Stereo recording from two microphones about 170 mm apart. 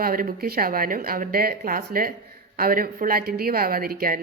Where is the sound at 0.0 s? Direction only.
60° right (ahead or behind).